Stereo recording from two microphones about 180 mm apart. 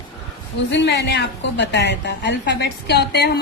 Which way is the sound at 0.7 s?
75° left (ahead or behind).